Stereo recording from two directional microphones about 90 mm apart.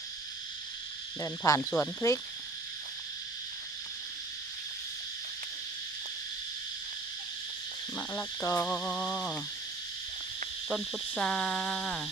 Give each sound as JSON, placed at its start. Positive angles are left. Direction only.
{"t": 1.2, "sound": "owl", "side_deg": 35}
{"t": 1.7, "sound": "insect", "side_deg": 25}
{"t": 7.9, "sound": "cricket", "side_deg": 20}
{"t": 8.4, "sound": "owl", "side_deg": 35}
{"t": 8.6, "sound": "insect", "side_deg": 10}
{"t": 10.7, "sound": "a sound", "side_deg": -5}
{"t": 11.2, "sound": "a sound", "side_deg": 10}